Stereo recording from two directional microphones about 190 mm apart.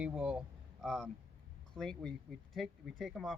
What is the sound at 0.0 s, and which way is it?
Speech, 5° right (ahead or behind).